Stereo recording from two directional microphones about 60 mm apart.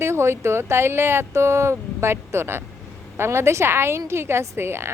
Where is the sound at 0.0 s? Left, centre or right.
Right.